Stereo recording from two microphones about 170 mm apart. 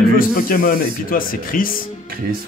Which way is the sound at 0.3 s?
55° left (ahead or behind).